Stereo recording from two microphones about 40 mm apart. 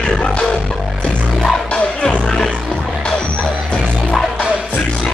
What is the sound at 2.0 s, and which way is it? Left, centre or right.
Music, centre.